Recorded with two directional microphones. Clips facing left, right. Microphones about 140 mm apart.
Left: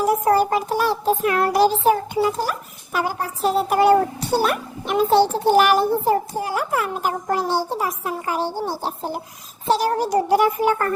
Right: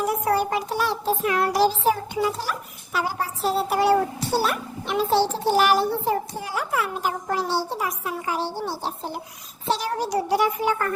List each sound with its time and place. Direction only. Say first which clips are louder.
0.0 s child singing: left 5 dB; 40° left (ahead or behind)